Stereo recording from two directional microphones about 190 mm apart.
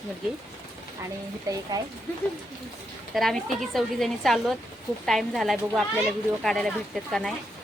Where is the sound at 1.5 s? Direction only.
20° right (ahead or behind).